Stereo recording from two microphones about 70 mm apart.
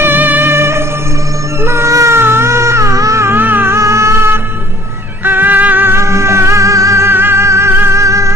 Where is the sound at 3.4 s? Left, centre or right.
Right.